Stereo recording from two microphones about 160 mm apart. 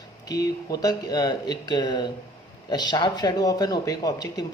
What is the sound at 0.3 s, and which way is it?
Speech, 20° left (ahead or behind).